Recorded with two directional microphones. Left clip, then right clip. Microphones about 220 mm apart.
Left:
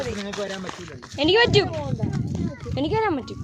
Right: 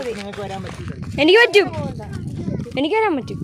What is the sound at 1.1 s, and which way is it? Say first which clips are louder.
Speech: right 6 dB; 30° right (ahead or behind).